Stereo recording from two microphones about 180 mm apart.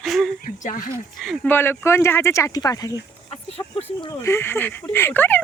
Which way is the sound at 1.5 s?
15° left (ahead or behind).